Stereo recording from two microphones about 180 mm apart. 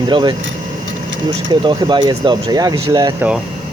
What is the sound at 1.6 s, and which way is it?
Speech, 25° right (ahead or behind).